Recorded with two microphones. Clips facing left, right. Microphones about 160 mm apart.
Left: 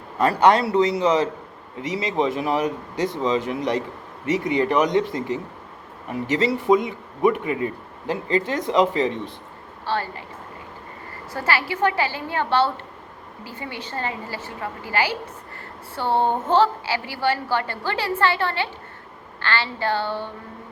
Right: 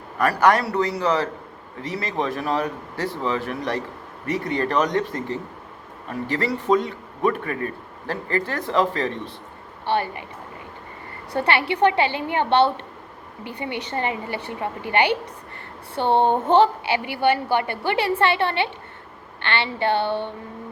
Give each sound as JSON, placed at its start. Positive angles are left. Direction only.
{"t": 0.2, "sound": "a man's voice", "side_deg": 25}
{"t": 9.8, "sound": "a woman's voice", "side_deg": -20}
{"t": 11.3, "sound": "a woman's voice", "side_deg": -25}